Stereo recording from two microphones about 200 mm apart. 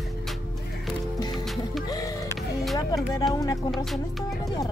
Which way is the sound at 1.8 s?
20° left (ahead or behind).